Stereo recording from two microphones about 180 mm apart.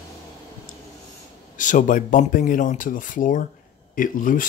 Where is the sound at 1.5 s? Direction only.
45° left (ahead or behind).